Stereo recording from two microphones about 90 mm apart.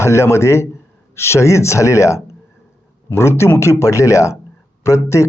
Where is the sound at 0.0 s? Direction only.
30° left (ahead or behind).